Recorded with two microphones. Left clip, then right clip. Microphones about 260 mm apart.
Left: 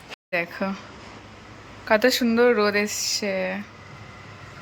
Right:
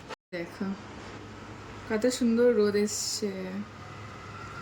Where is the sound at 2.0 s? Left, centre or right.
Centre.